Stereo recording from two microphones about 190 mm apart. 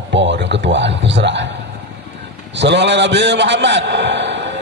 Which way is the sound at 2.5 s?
65° right (ahead or behind).